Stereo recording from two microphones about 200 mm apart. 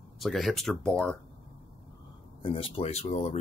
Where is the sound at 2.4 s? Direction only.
30° left (ahead or behind).